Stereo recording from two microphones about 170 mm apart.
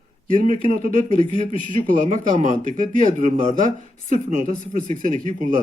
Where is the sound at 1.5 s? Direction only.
30° left (ahead or behind).